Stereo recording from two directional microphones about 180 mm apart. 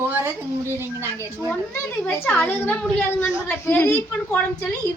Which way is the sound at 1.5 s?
10° left (ahead or behind).